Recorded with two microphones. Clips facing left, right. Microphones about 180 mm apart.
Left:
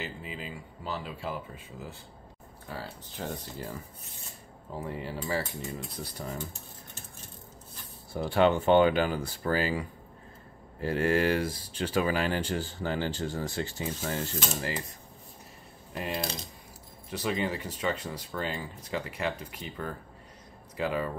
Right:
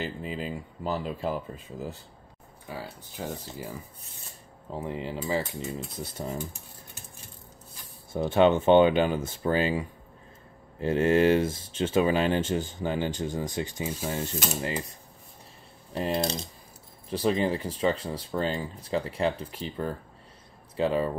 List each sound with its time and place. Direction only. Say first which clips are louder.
0.0 s speech: right 6 dB; 40° right (ahead or behind)
2.7 s speech: right 2 dB; 10° right (ahead or behind)
4.6 s speech: right 3 dB; 20° right (ahead or behind)
8.1 s speech: right 3 dB; 20° right (ahead or behind)
15.9 s speech: right 6 dB; 30° right (ahead or behind)